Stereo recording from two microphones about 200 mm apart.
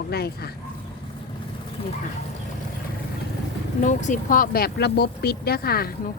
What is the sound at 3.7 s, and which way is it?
Speech, 40° left (ahead or behind).